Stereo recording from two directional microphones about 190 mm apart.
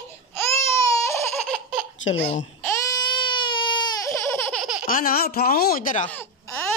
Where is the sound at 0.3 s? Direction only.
15° left (ahead or behind).